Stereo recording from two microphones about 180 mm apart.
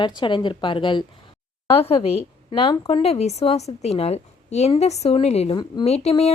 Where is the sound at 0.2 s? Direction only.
25° left (ahead or behind).